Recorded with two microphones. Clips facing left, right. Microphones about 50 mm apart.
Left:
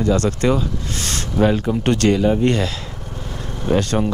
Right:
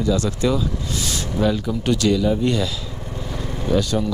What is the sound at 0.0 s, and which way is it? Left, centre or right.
Speech, left.